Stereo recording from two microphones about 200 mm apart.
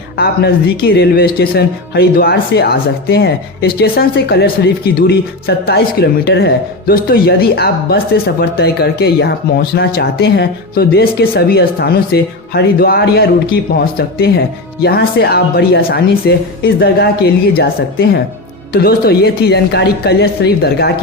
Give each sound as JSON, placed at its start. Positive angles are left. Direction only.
{"t": 0.2, "sound": "speech", "side_deg": 50}